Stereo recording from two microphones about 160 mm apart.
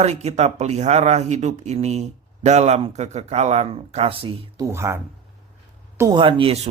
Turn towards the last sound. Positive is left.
turn(degrees=-35)  # may be behind; listen again after turning